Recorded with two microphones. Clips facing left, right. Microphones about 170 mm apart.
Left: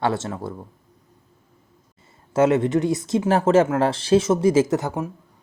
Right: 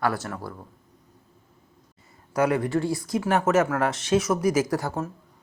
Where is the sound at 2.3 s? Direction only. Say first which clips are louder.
Left 5 dB; 25° left (ahead or behind).